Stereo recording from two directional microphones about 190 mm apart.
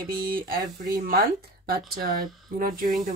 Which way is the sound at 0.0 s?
50° right (ahead or behind).